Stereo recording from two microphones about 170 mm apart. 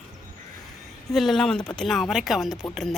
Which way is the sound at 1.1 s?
Centre (ahead or behind).